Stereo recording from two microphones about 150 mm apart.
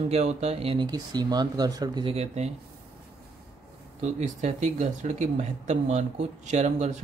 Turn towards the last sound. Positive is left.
turn(degrees=-50)  # may be behind; listen again after turning